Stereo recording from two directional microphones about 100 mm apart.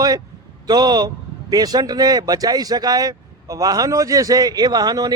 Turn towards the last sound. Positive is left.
turn(degrees=-40)  # may be behind; listen again after turning